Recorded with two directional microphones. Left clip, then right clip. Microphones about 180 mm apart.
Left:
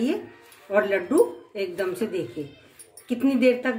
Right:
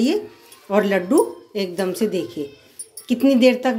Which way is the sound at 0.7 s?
45° right (ahead or behind).